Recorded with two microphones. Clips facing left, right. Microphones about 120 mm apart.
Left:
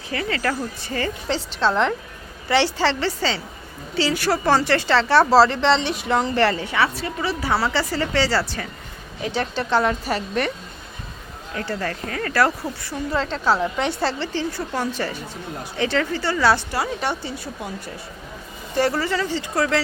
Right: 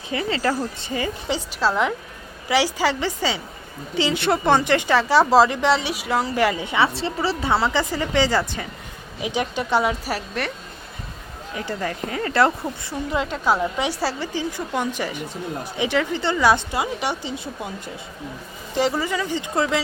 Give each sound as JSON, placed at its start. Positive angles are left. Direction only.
{"t": 0.1, "sound": "speech", "side_deg": -20}
{"t": 11.5, "sound": "speech", "side_deg": -15}
{"t": 13.1, "sound": "speech", "side_deg": -10}
{"t": 18.8, "sound": "speech", "side_deg": -15}